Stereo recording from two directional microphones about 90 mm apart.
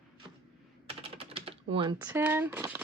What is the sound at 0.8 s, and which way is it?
Typing, 90° right.